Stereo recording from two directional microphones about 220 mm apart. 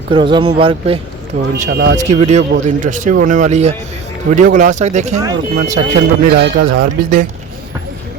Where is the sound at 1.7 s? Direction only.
50° right (ahead or behind).